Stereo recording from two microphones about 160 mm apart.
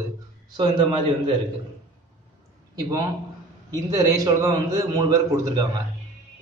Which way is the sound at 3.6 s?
20° right (ahead or behind).